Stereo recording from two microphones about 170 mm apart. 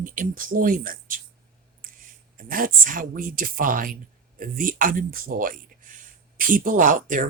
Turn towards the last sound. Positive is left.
turn(degrees=-50)  # may be behind; listen again after turning